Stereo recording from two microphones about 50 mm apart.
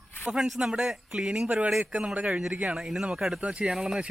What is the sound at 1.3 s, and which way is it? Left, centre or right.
A man's voice, right.